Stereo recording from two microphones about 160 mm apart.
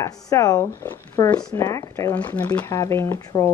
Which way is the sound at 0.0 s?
20° left (ahead or behind).